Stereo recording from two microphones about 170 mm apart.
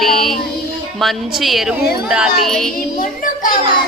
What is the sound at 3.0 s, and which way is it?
Speech, 55° left (ahead or behind).